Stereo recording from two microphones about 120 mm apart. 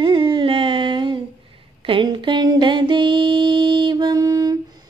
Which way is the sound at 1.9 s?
45° right (ahead or behind).